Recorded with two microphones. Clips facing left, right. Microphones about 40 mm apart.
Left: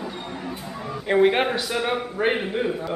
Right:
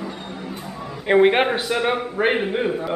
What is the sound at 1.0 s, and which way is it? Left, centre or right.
Speech, right.